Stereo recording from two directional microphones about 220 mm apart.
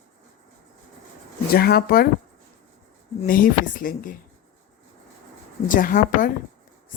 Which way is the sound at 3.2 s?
40° left (ahead or behind).